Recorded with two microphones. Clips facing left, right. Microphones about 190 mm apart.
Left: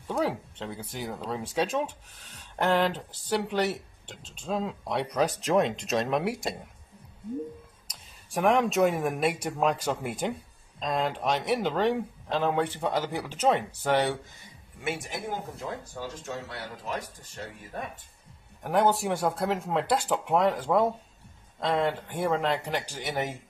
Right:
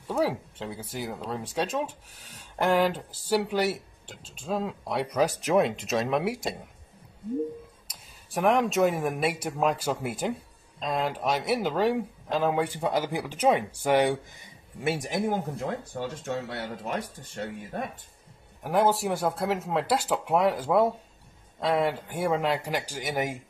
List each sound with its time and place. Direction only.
0.1 s speech: 5° right (ahead or behind)
7.9 s speech: centre (ahead or behind)
14.8 s speech: 35° right (ahead or behind)
16.0 s speech: 65° right (ahead or behind)
18.6 s speech: centre (ahead or behind)